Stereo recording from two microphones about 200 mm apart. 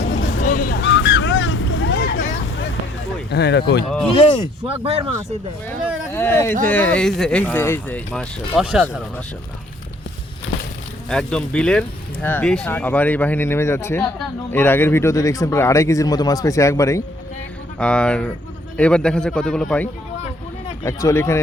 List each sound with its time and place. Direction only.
0.0 s vehicle: 55° left (ahead or behind)
0.8 s vehicle: 65° left (ahead or behind)
3.2 s speech: 60° left (ahead or behind)
4.8 s speech: 30° right (ahead or behind)
6.1 s speech: 10° left (ahead or behind)
11.1 s speech: 5° left (ahead or behind)
17.7 s speech: 5° left (ahead or behind)